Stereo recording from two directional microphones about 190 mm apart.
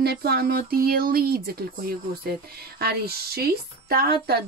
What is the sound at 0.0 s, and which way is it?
A woman's voice, 55° right (ahead or behind).